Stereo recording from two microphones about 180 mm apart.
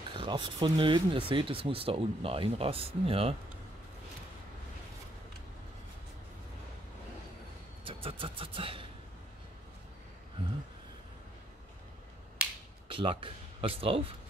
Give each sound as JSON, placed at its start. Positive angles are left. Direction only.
{"t": 0.1, "sound": "speech", "side_deg": -25}
{"t": 7.8, "sound": "music", "side_deg": -30}
{"t": 12.8, "sound": "speech", "side_deg": -30}